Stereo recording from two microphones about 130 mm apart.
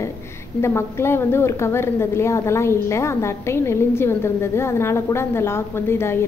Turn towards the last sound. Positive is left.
turn(degrees=20)  # may be behind; listen again after turning